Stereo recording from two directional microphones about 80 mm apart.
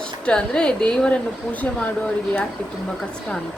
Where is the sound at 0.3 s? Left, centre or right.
Centre.